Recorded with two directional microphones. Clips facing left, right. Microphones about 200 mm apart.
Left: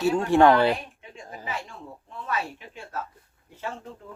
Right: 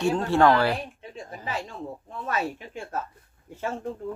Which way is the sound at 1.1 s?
35° right (ahead or behind).